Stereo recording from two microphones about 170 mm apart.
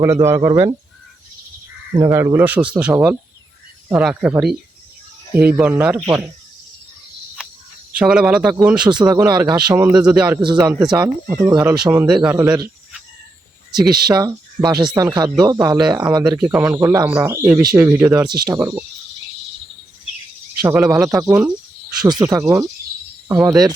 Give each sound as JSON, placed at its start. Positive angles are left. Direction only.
{"t": 0.0, "sound": "a man's voice", "side_deg": -15}
{"t": 2.1, "sound": "a man's voice", "side_deg": -15}
{"t": 7.9, "sound": "speech", "side_deg": -5}
{"t": 8.9, "sound": "a man's voice", "side_deg": -25}
{"t": 10.0, "sound": "a man's voice", "side_deg": -10}
{"t": 10.4, "sound": "speech", "side_deg": -25}
{"t": 10.9, "sound": "a man's voice", "side_deg": -10}
{"t": 13.7, "sound": "speech", "side_deg": 0}
{"t": 14.1, "sound": "speech", "side_deg": -20}
{"t": 16.4, "sound": "a man's voice", "side_deg": -5}
{"t": 20.6, "sound": "a man's voice", "side_deg": -15}